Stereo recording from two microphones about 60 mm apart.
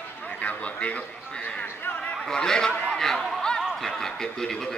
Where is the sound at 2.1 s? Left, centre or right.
Centre.